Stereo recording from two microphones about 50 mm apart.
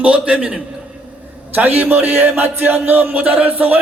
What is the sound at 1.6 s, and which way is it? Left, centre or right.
Speech, right.